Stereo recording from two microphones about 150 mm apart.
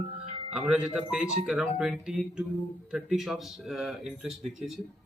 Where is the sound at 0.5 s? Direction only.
5° right (ahead or behind).